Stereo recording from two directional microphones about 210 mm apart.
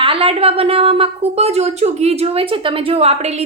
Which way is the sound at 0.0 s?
25° right (ahead or behind).